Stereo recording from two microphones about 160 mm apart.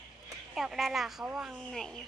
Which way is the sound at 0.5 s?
Centre (ahead or behind).